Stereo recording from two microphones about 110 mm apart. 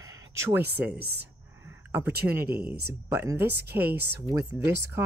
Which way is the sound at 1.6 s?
20° right (ahead or behind).